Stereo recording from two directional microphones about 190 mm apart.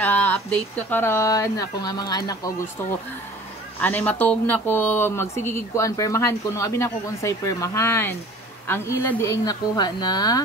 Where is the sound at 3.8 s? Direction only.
10° left (ahead or behind).